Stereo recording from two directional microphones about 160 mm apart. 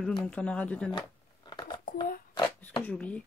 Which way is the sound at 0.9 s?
25° left (ahead or behind).